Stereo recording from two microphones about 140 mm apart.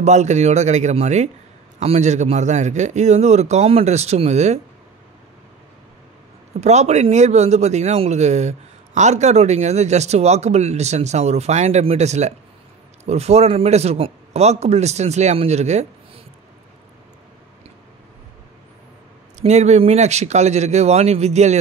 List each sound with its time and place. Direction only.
0.0 s a man's voice: 55° right (ahead or behind)
6.6 s a man's voice: 55° right (ahead or behind)
19.4 s a man's voice: 55° right (ahead or behind)